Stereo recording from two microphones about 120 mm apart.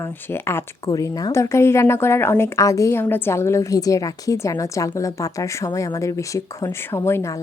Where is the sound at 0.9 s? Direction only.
30° left (ahead or behind).